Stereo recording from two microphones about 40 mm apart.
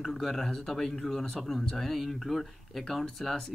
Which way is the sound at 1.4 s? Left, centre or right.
Centre.